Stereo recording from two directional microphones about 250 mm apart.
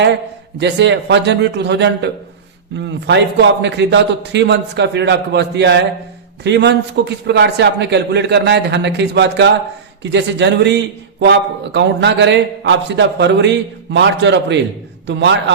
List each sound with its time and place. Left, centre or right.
0.6 s a man's voice: right